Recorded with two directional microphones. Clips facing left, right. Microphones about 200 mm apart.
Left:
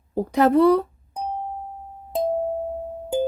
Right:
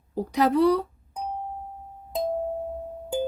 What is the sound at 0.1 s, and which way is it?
Speech, 50° left (ahead or behind).